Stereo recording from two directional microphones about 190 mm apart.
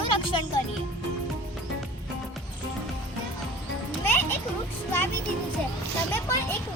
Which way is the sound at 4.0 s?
10° left (ahead or behind).